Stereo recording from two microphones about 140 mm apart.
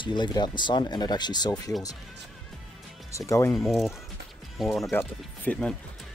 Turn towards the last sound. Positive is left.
turn(degrees=10)  # may be behind; listen again after turning